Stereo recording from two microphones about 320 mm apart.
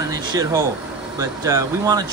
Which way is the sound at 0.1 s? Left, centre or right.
Centre.